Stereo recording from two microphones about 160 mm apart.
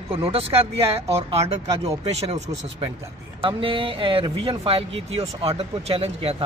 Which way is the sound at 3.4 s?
35° right (ahead or behind).